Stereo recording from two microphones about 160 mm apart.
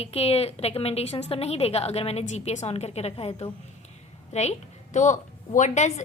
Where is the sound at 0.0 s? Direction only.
40° left (ahead or behind).